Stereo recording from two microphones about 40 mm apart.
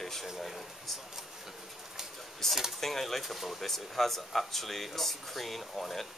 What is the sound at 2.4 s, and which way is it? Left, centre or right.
Speech, centre.